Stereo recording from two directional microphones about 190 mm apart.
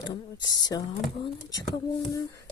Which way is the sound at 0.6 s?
20° left (ahead or behind).